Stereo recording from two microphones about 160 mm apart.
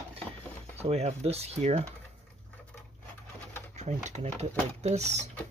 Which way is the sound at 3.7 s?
45° right (ahead or behind).